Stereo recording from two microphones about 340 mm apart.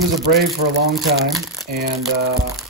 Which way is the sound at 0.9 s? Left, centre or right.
Centre.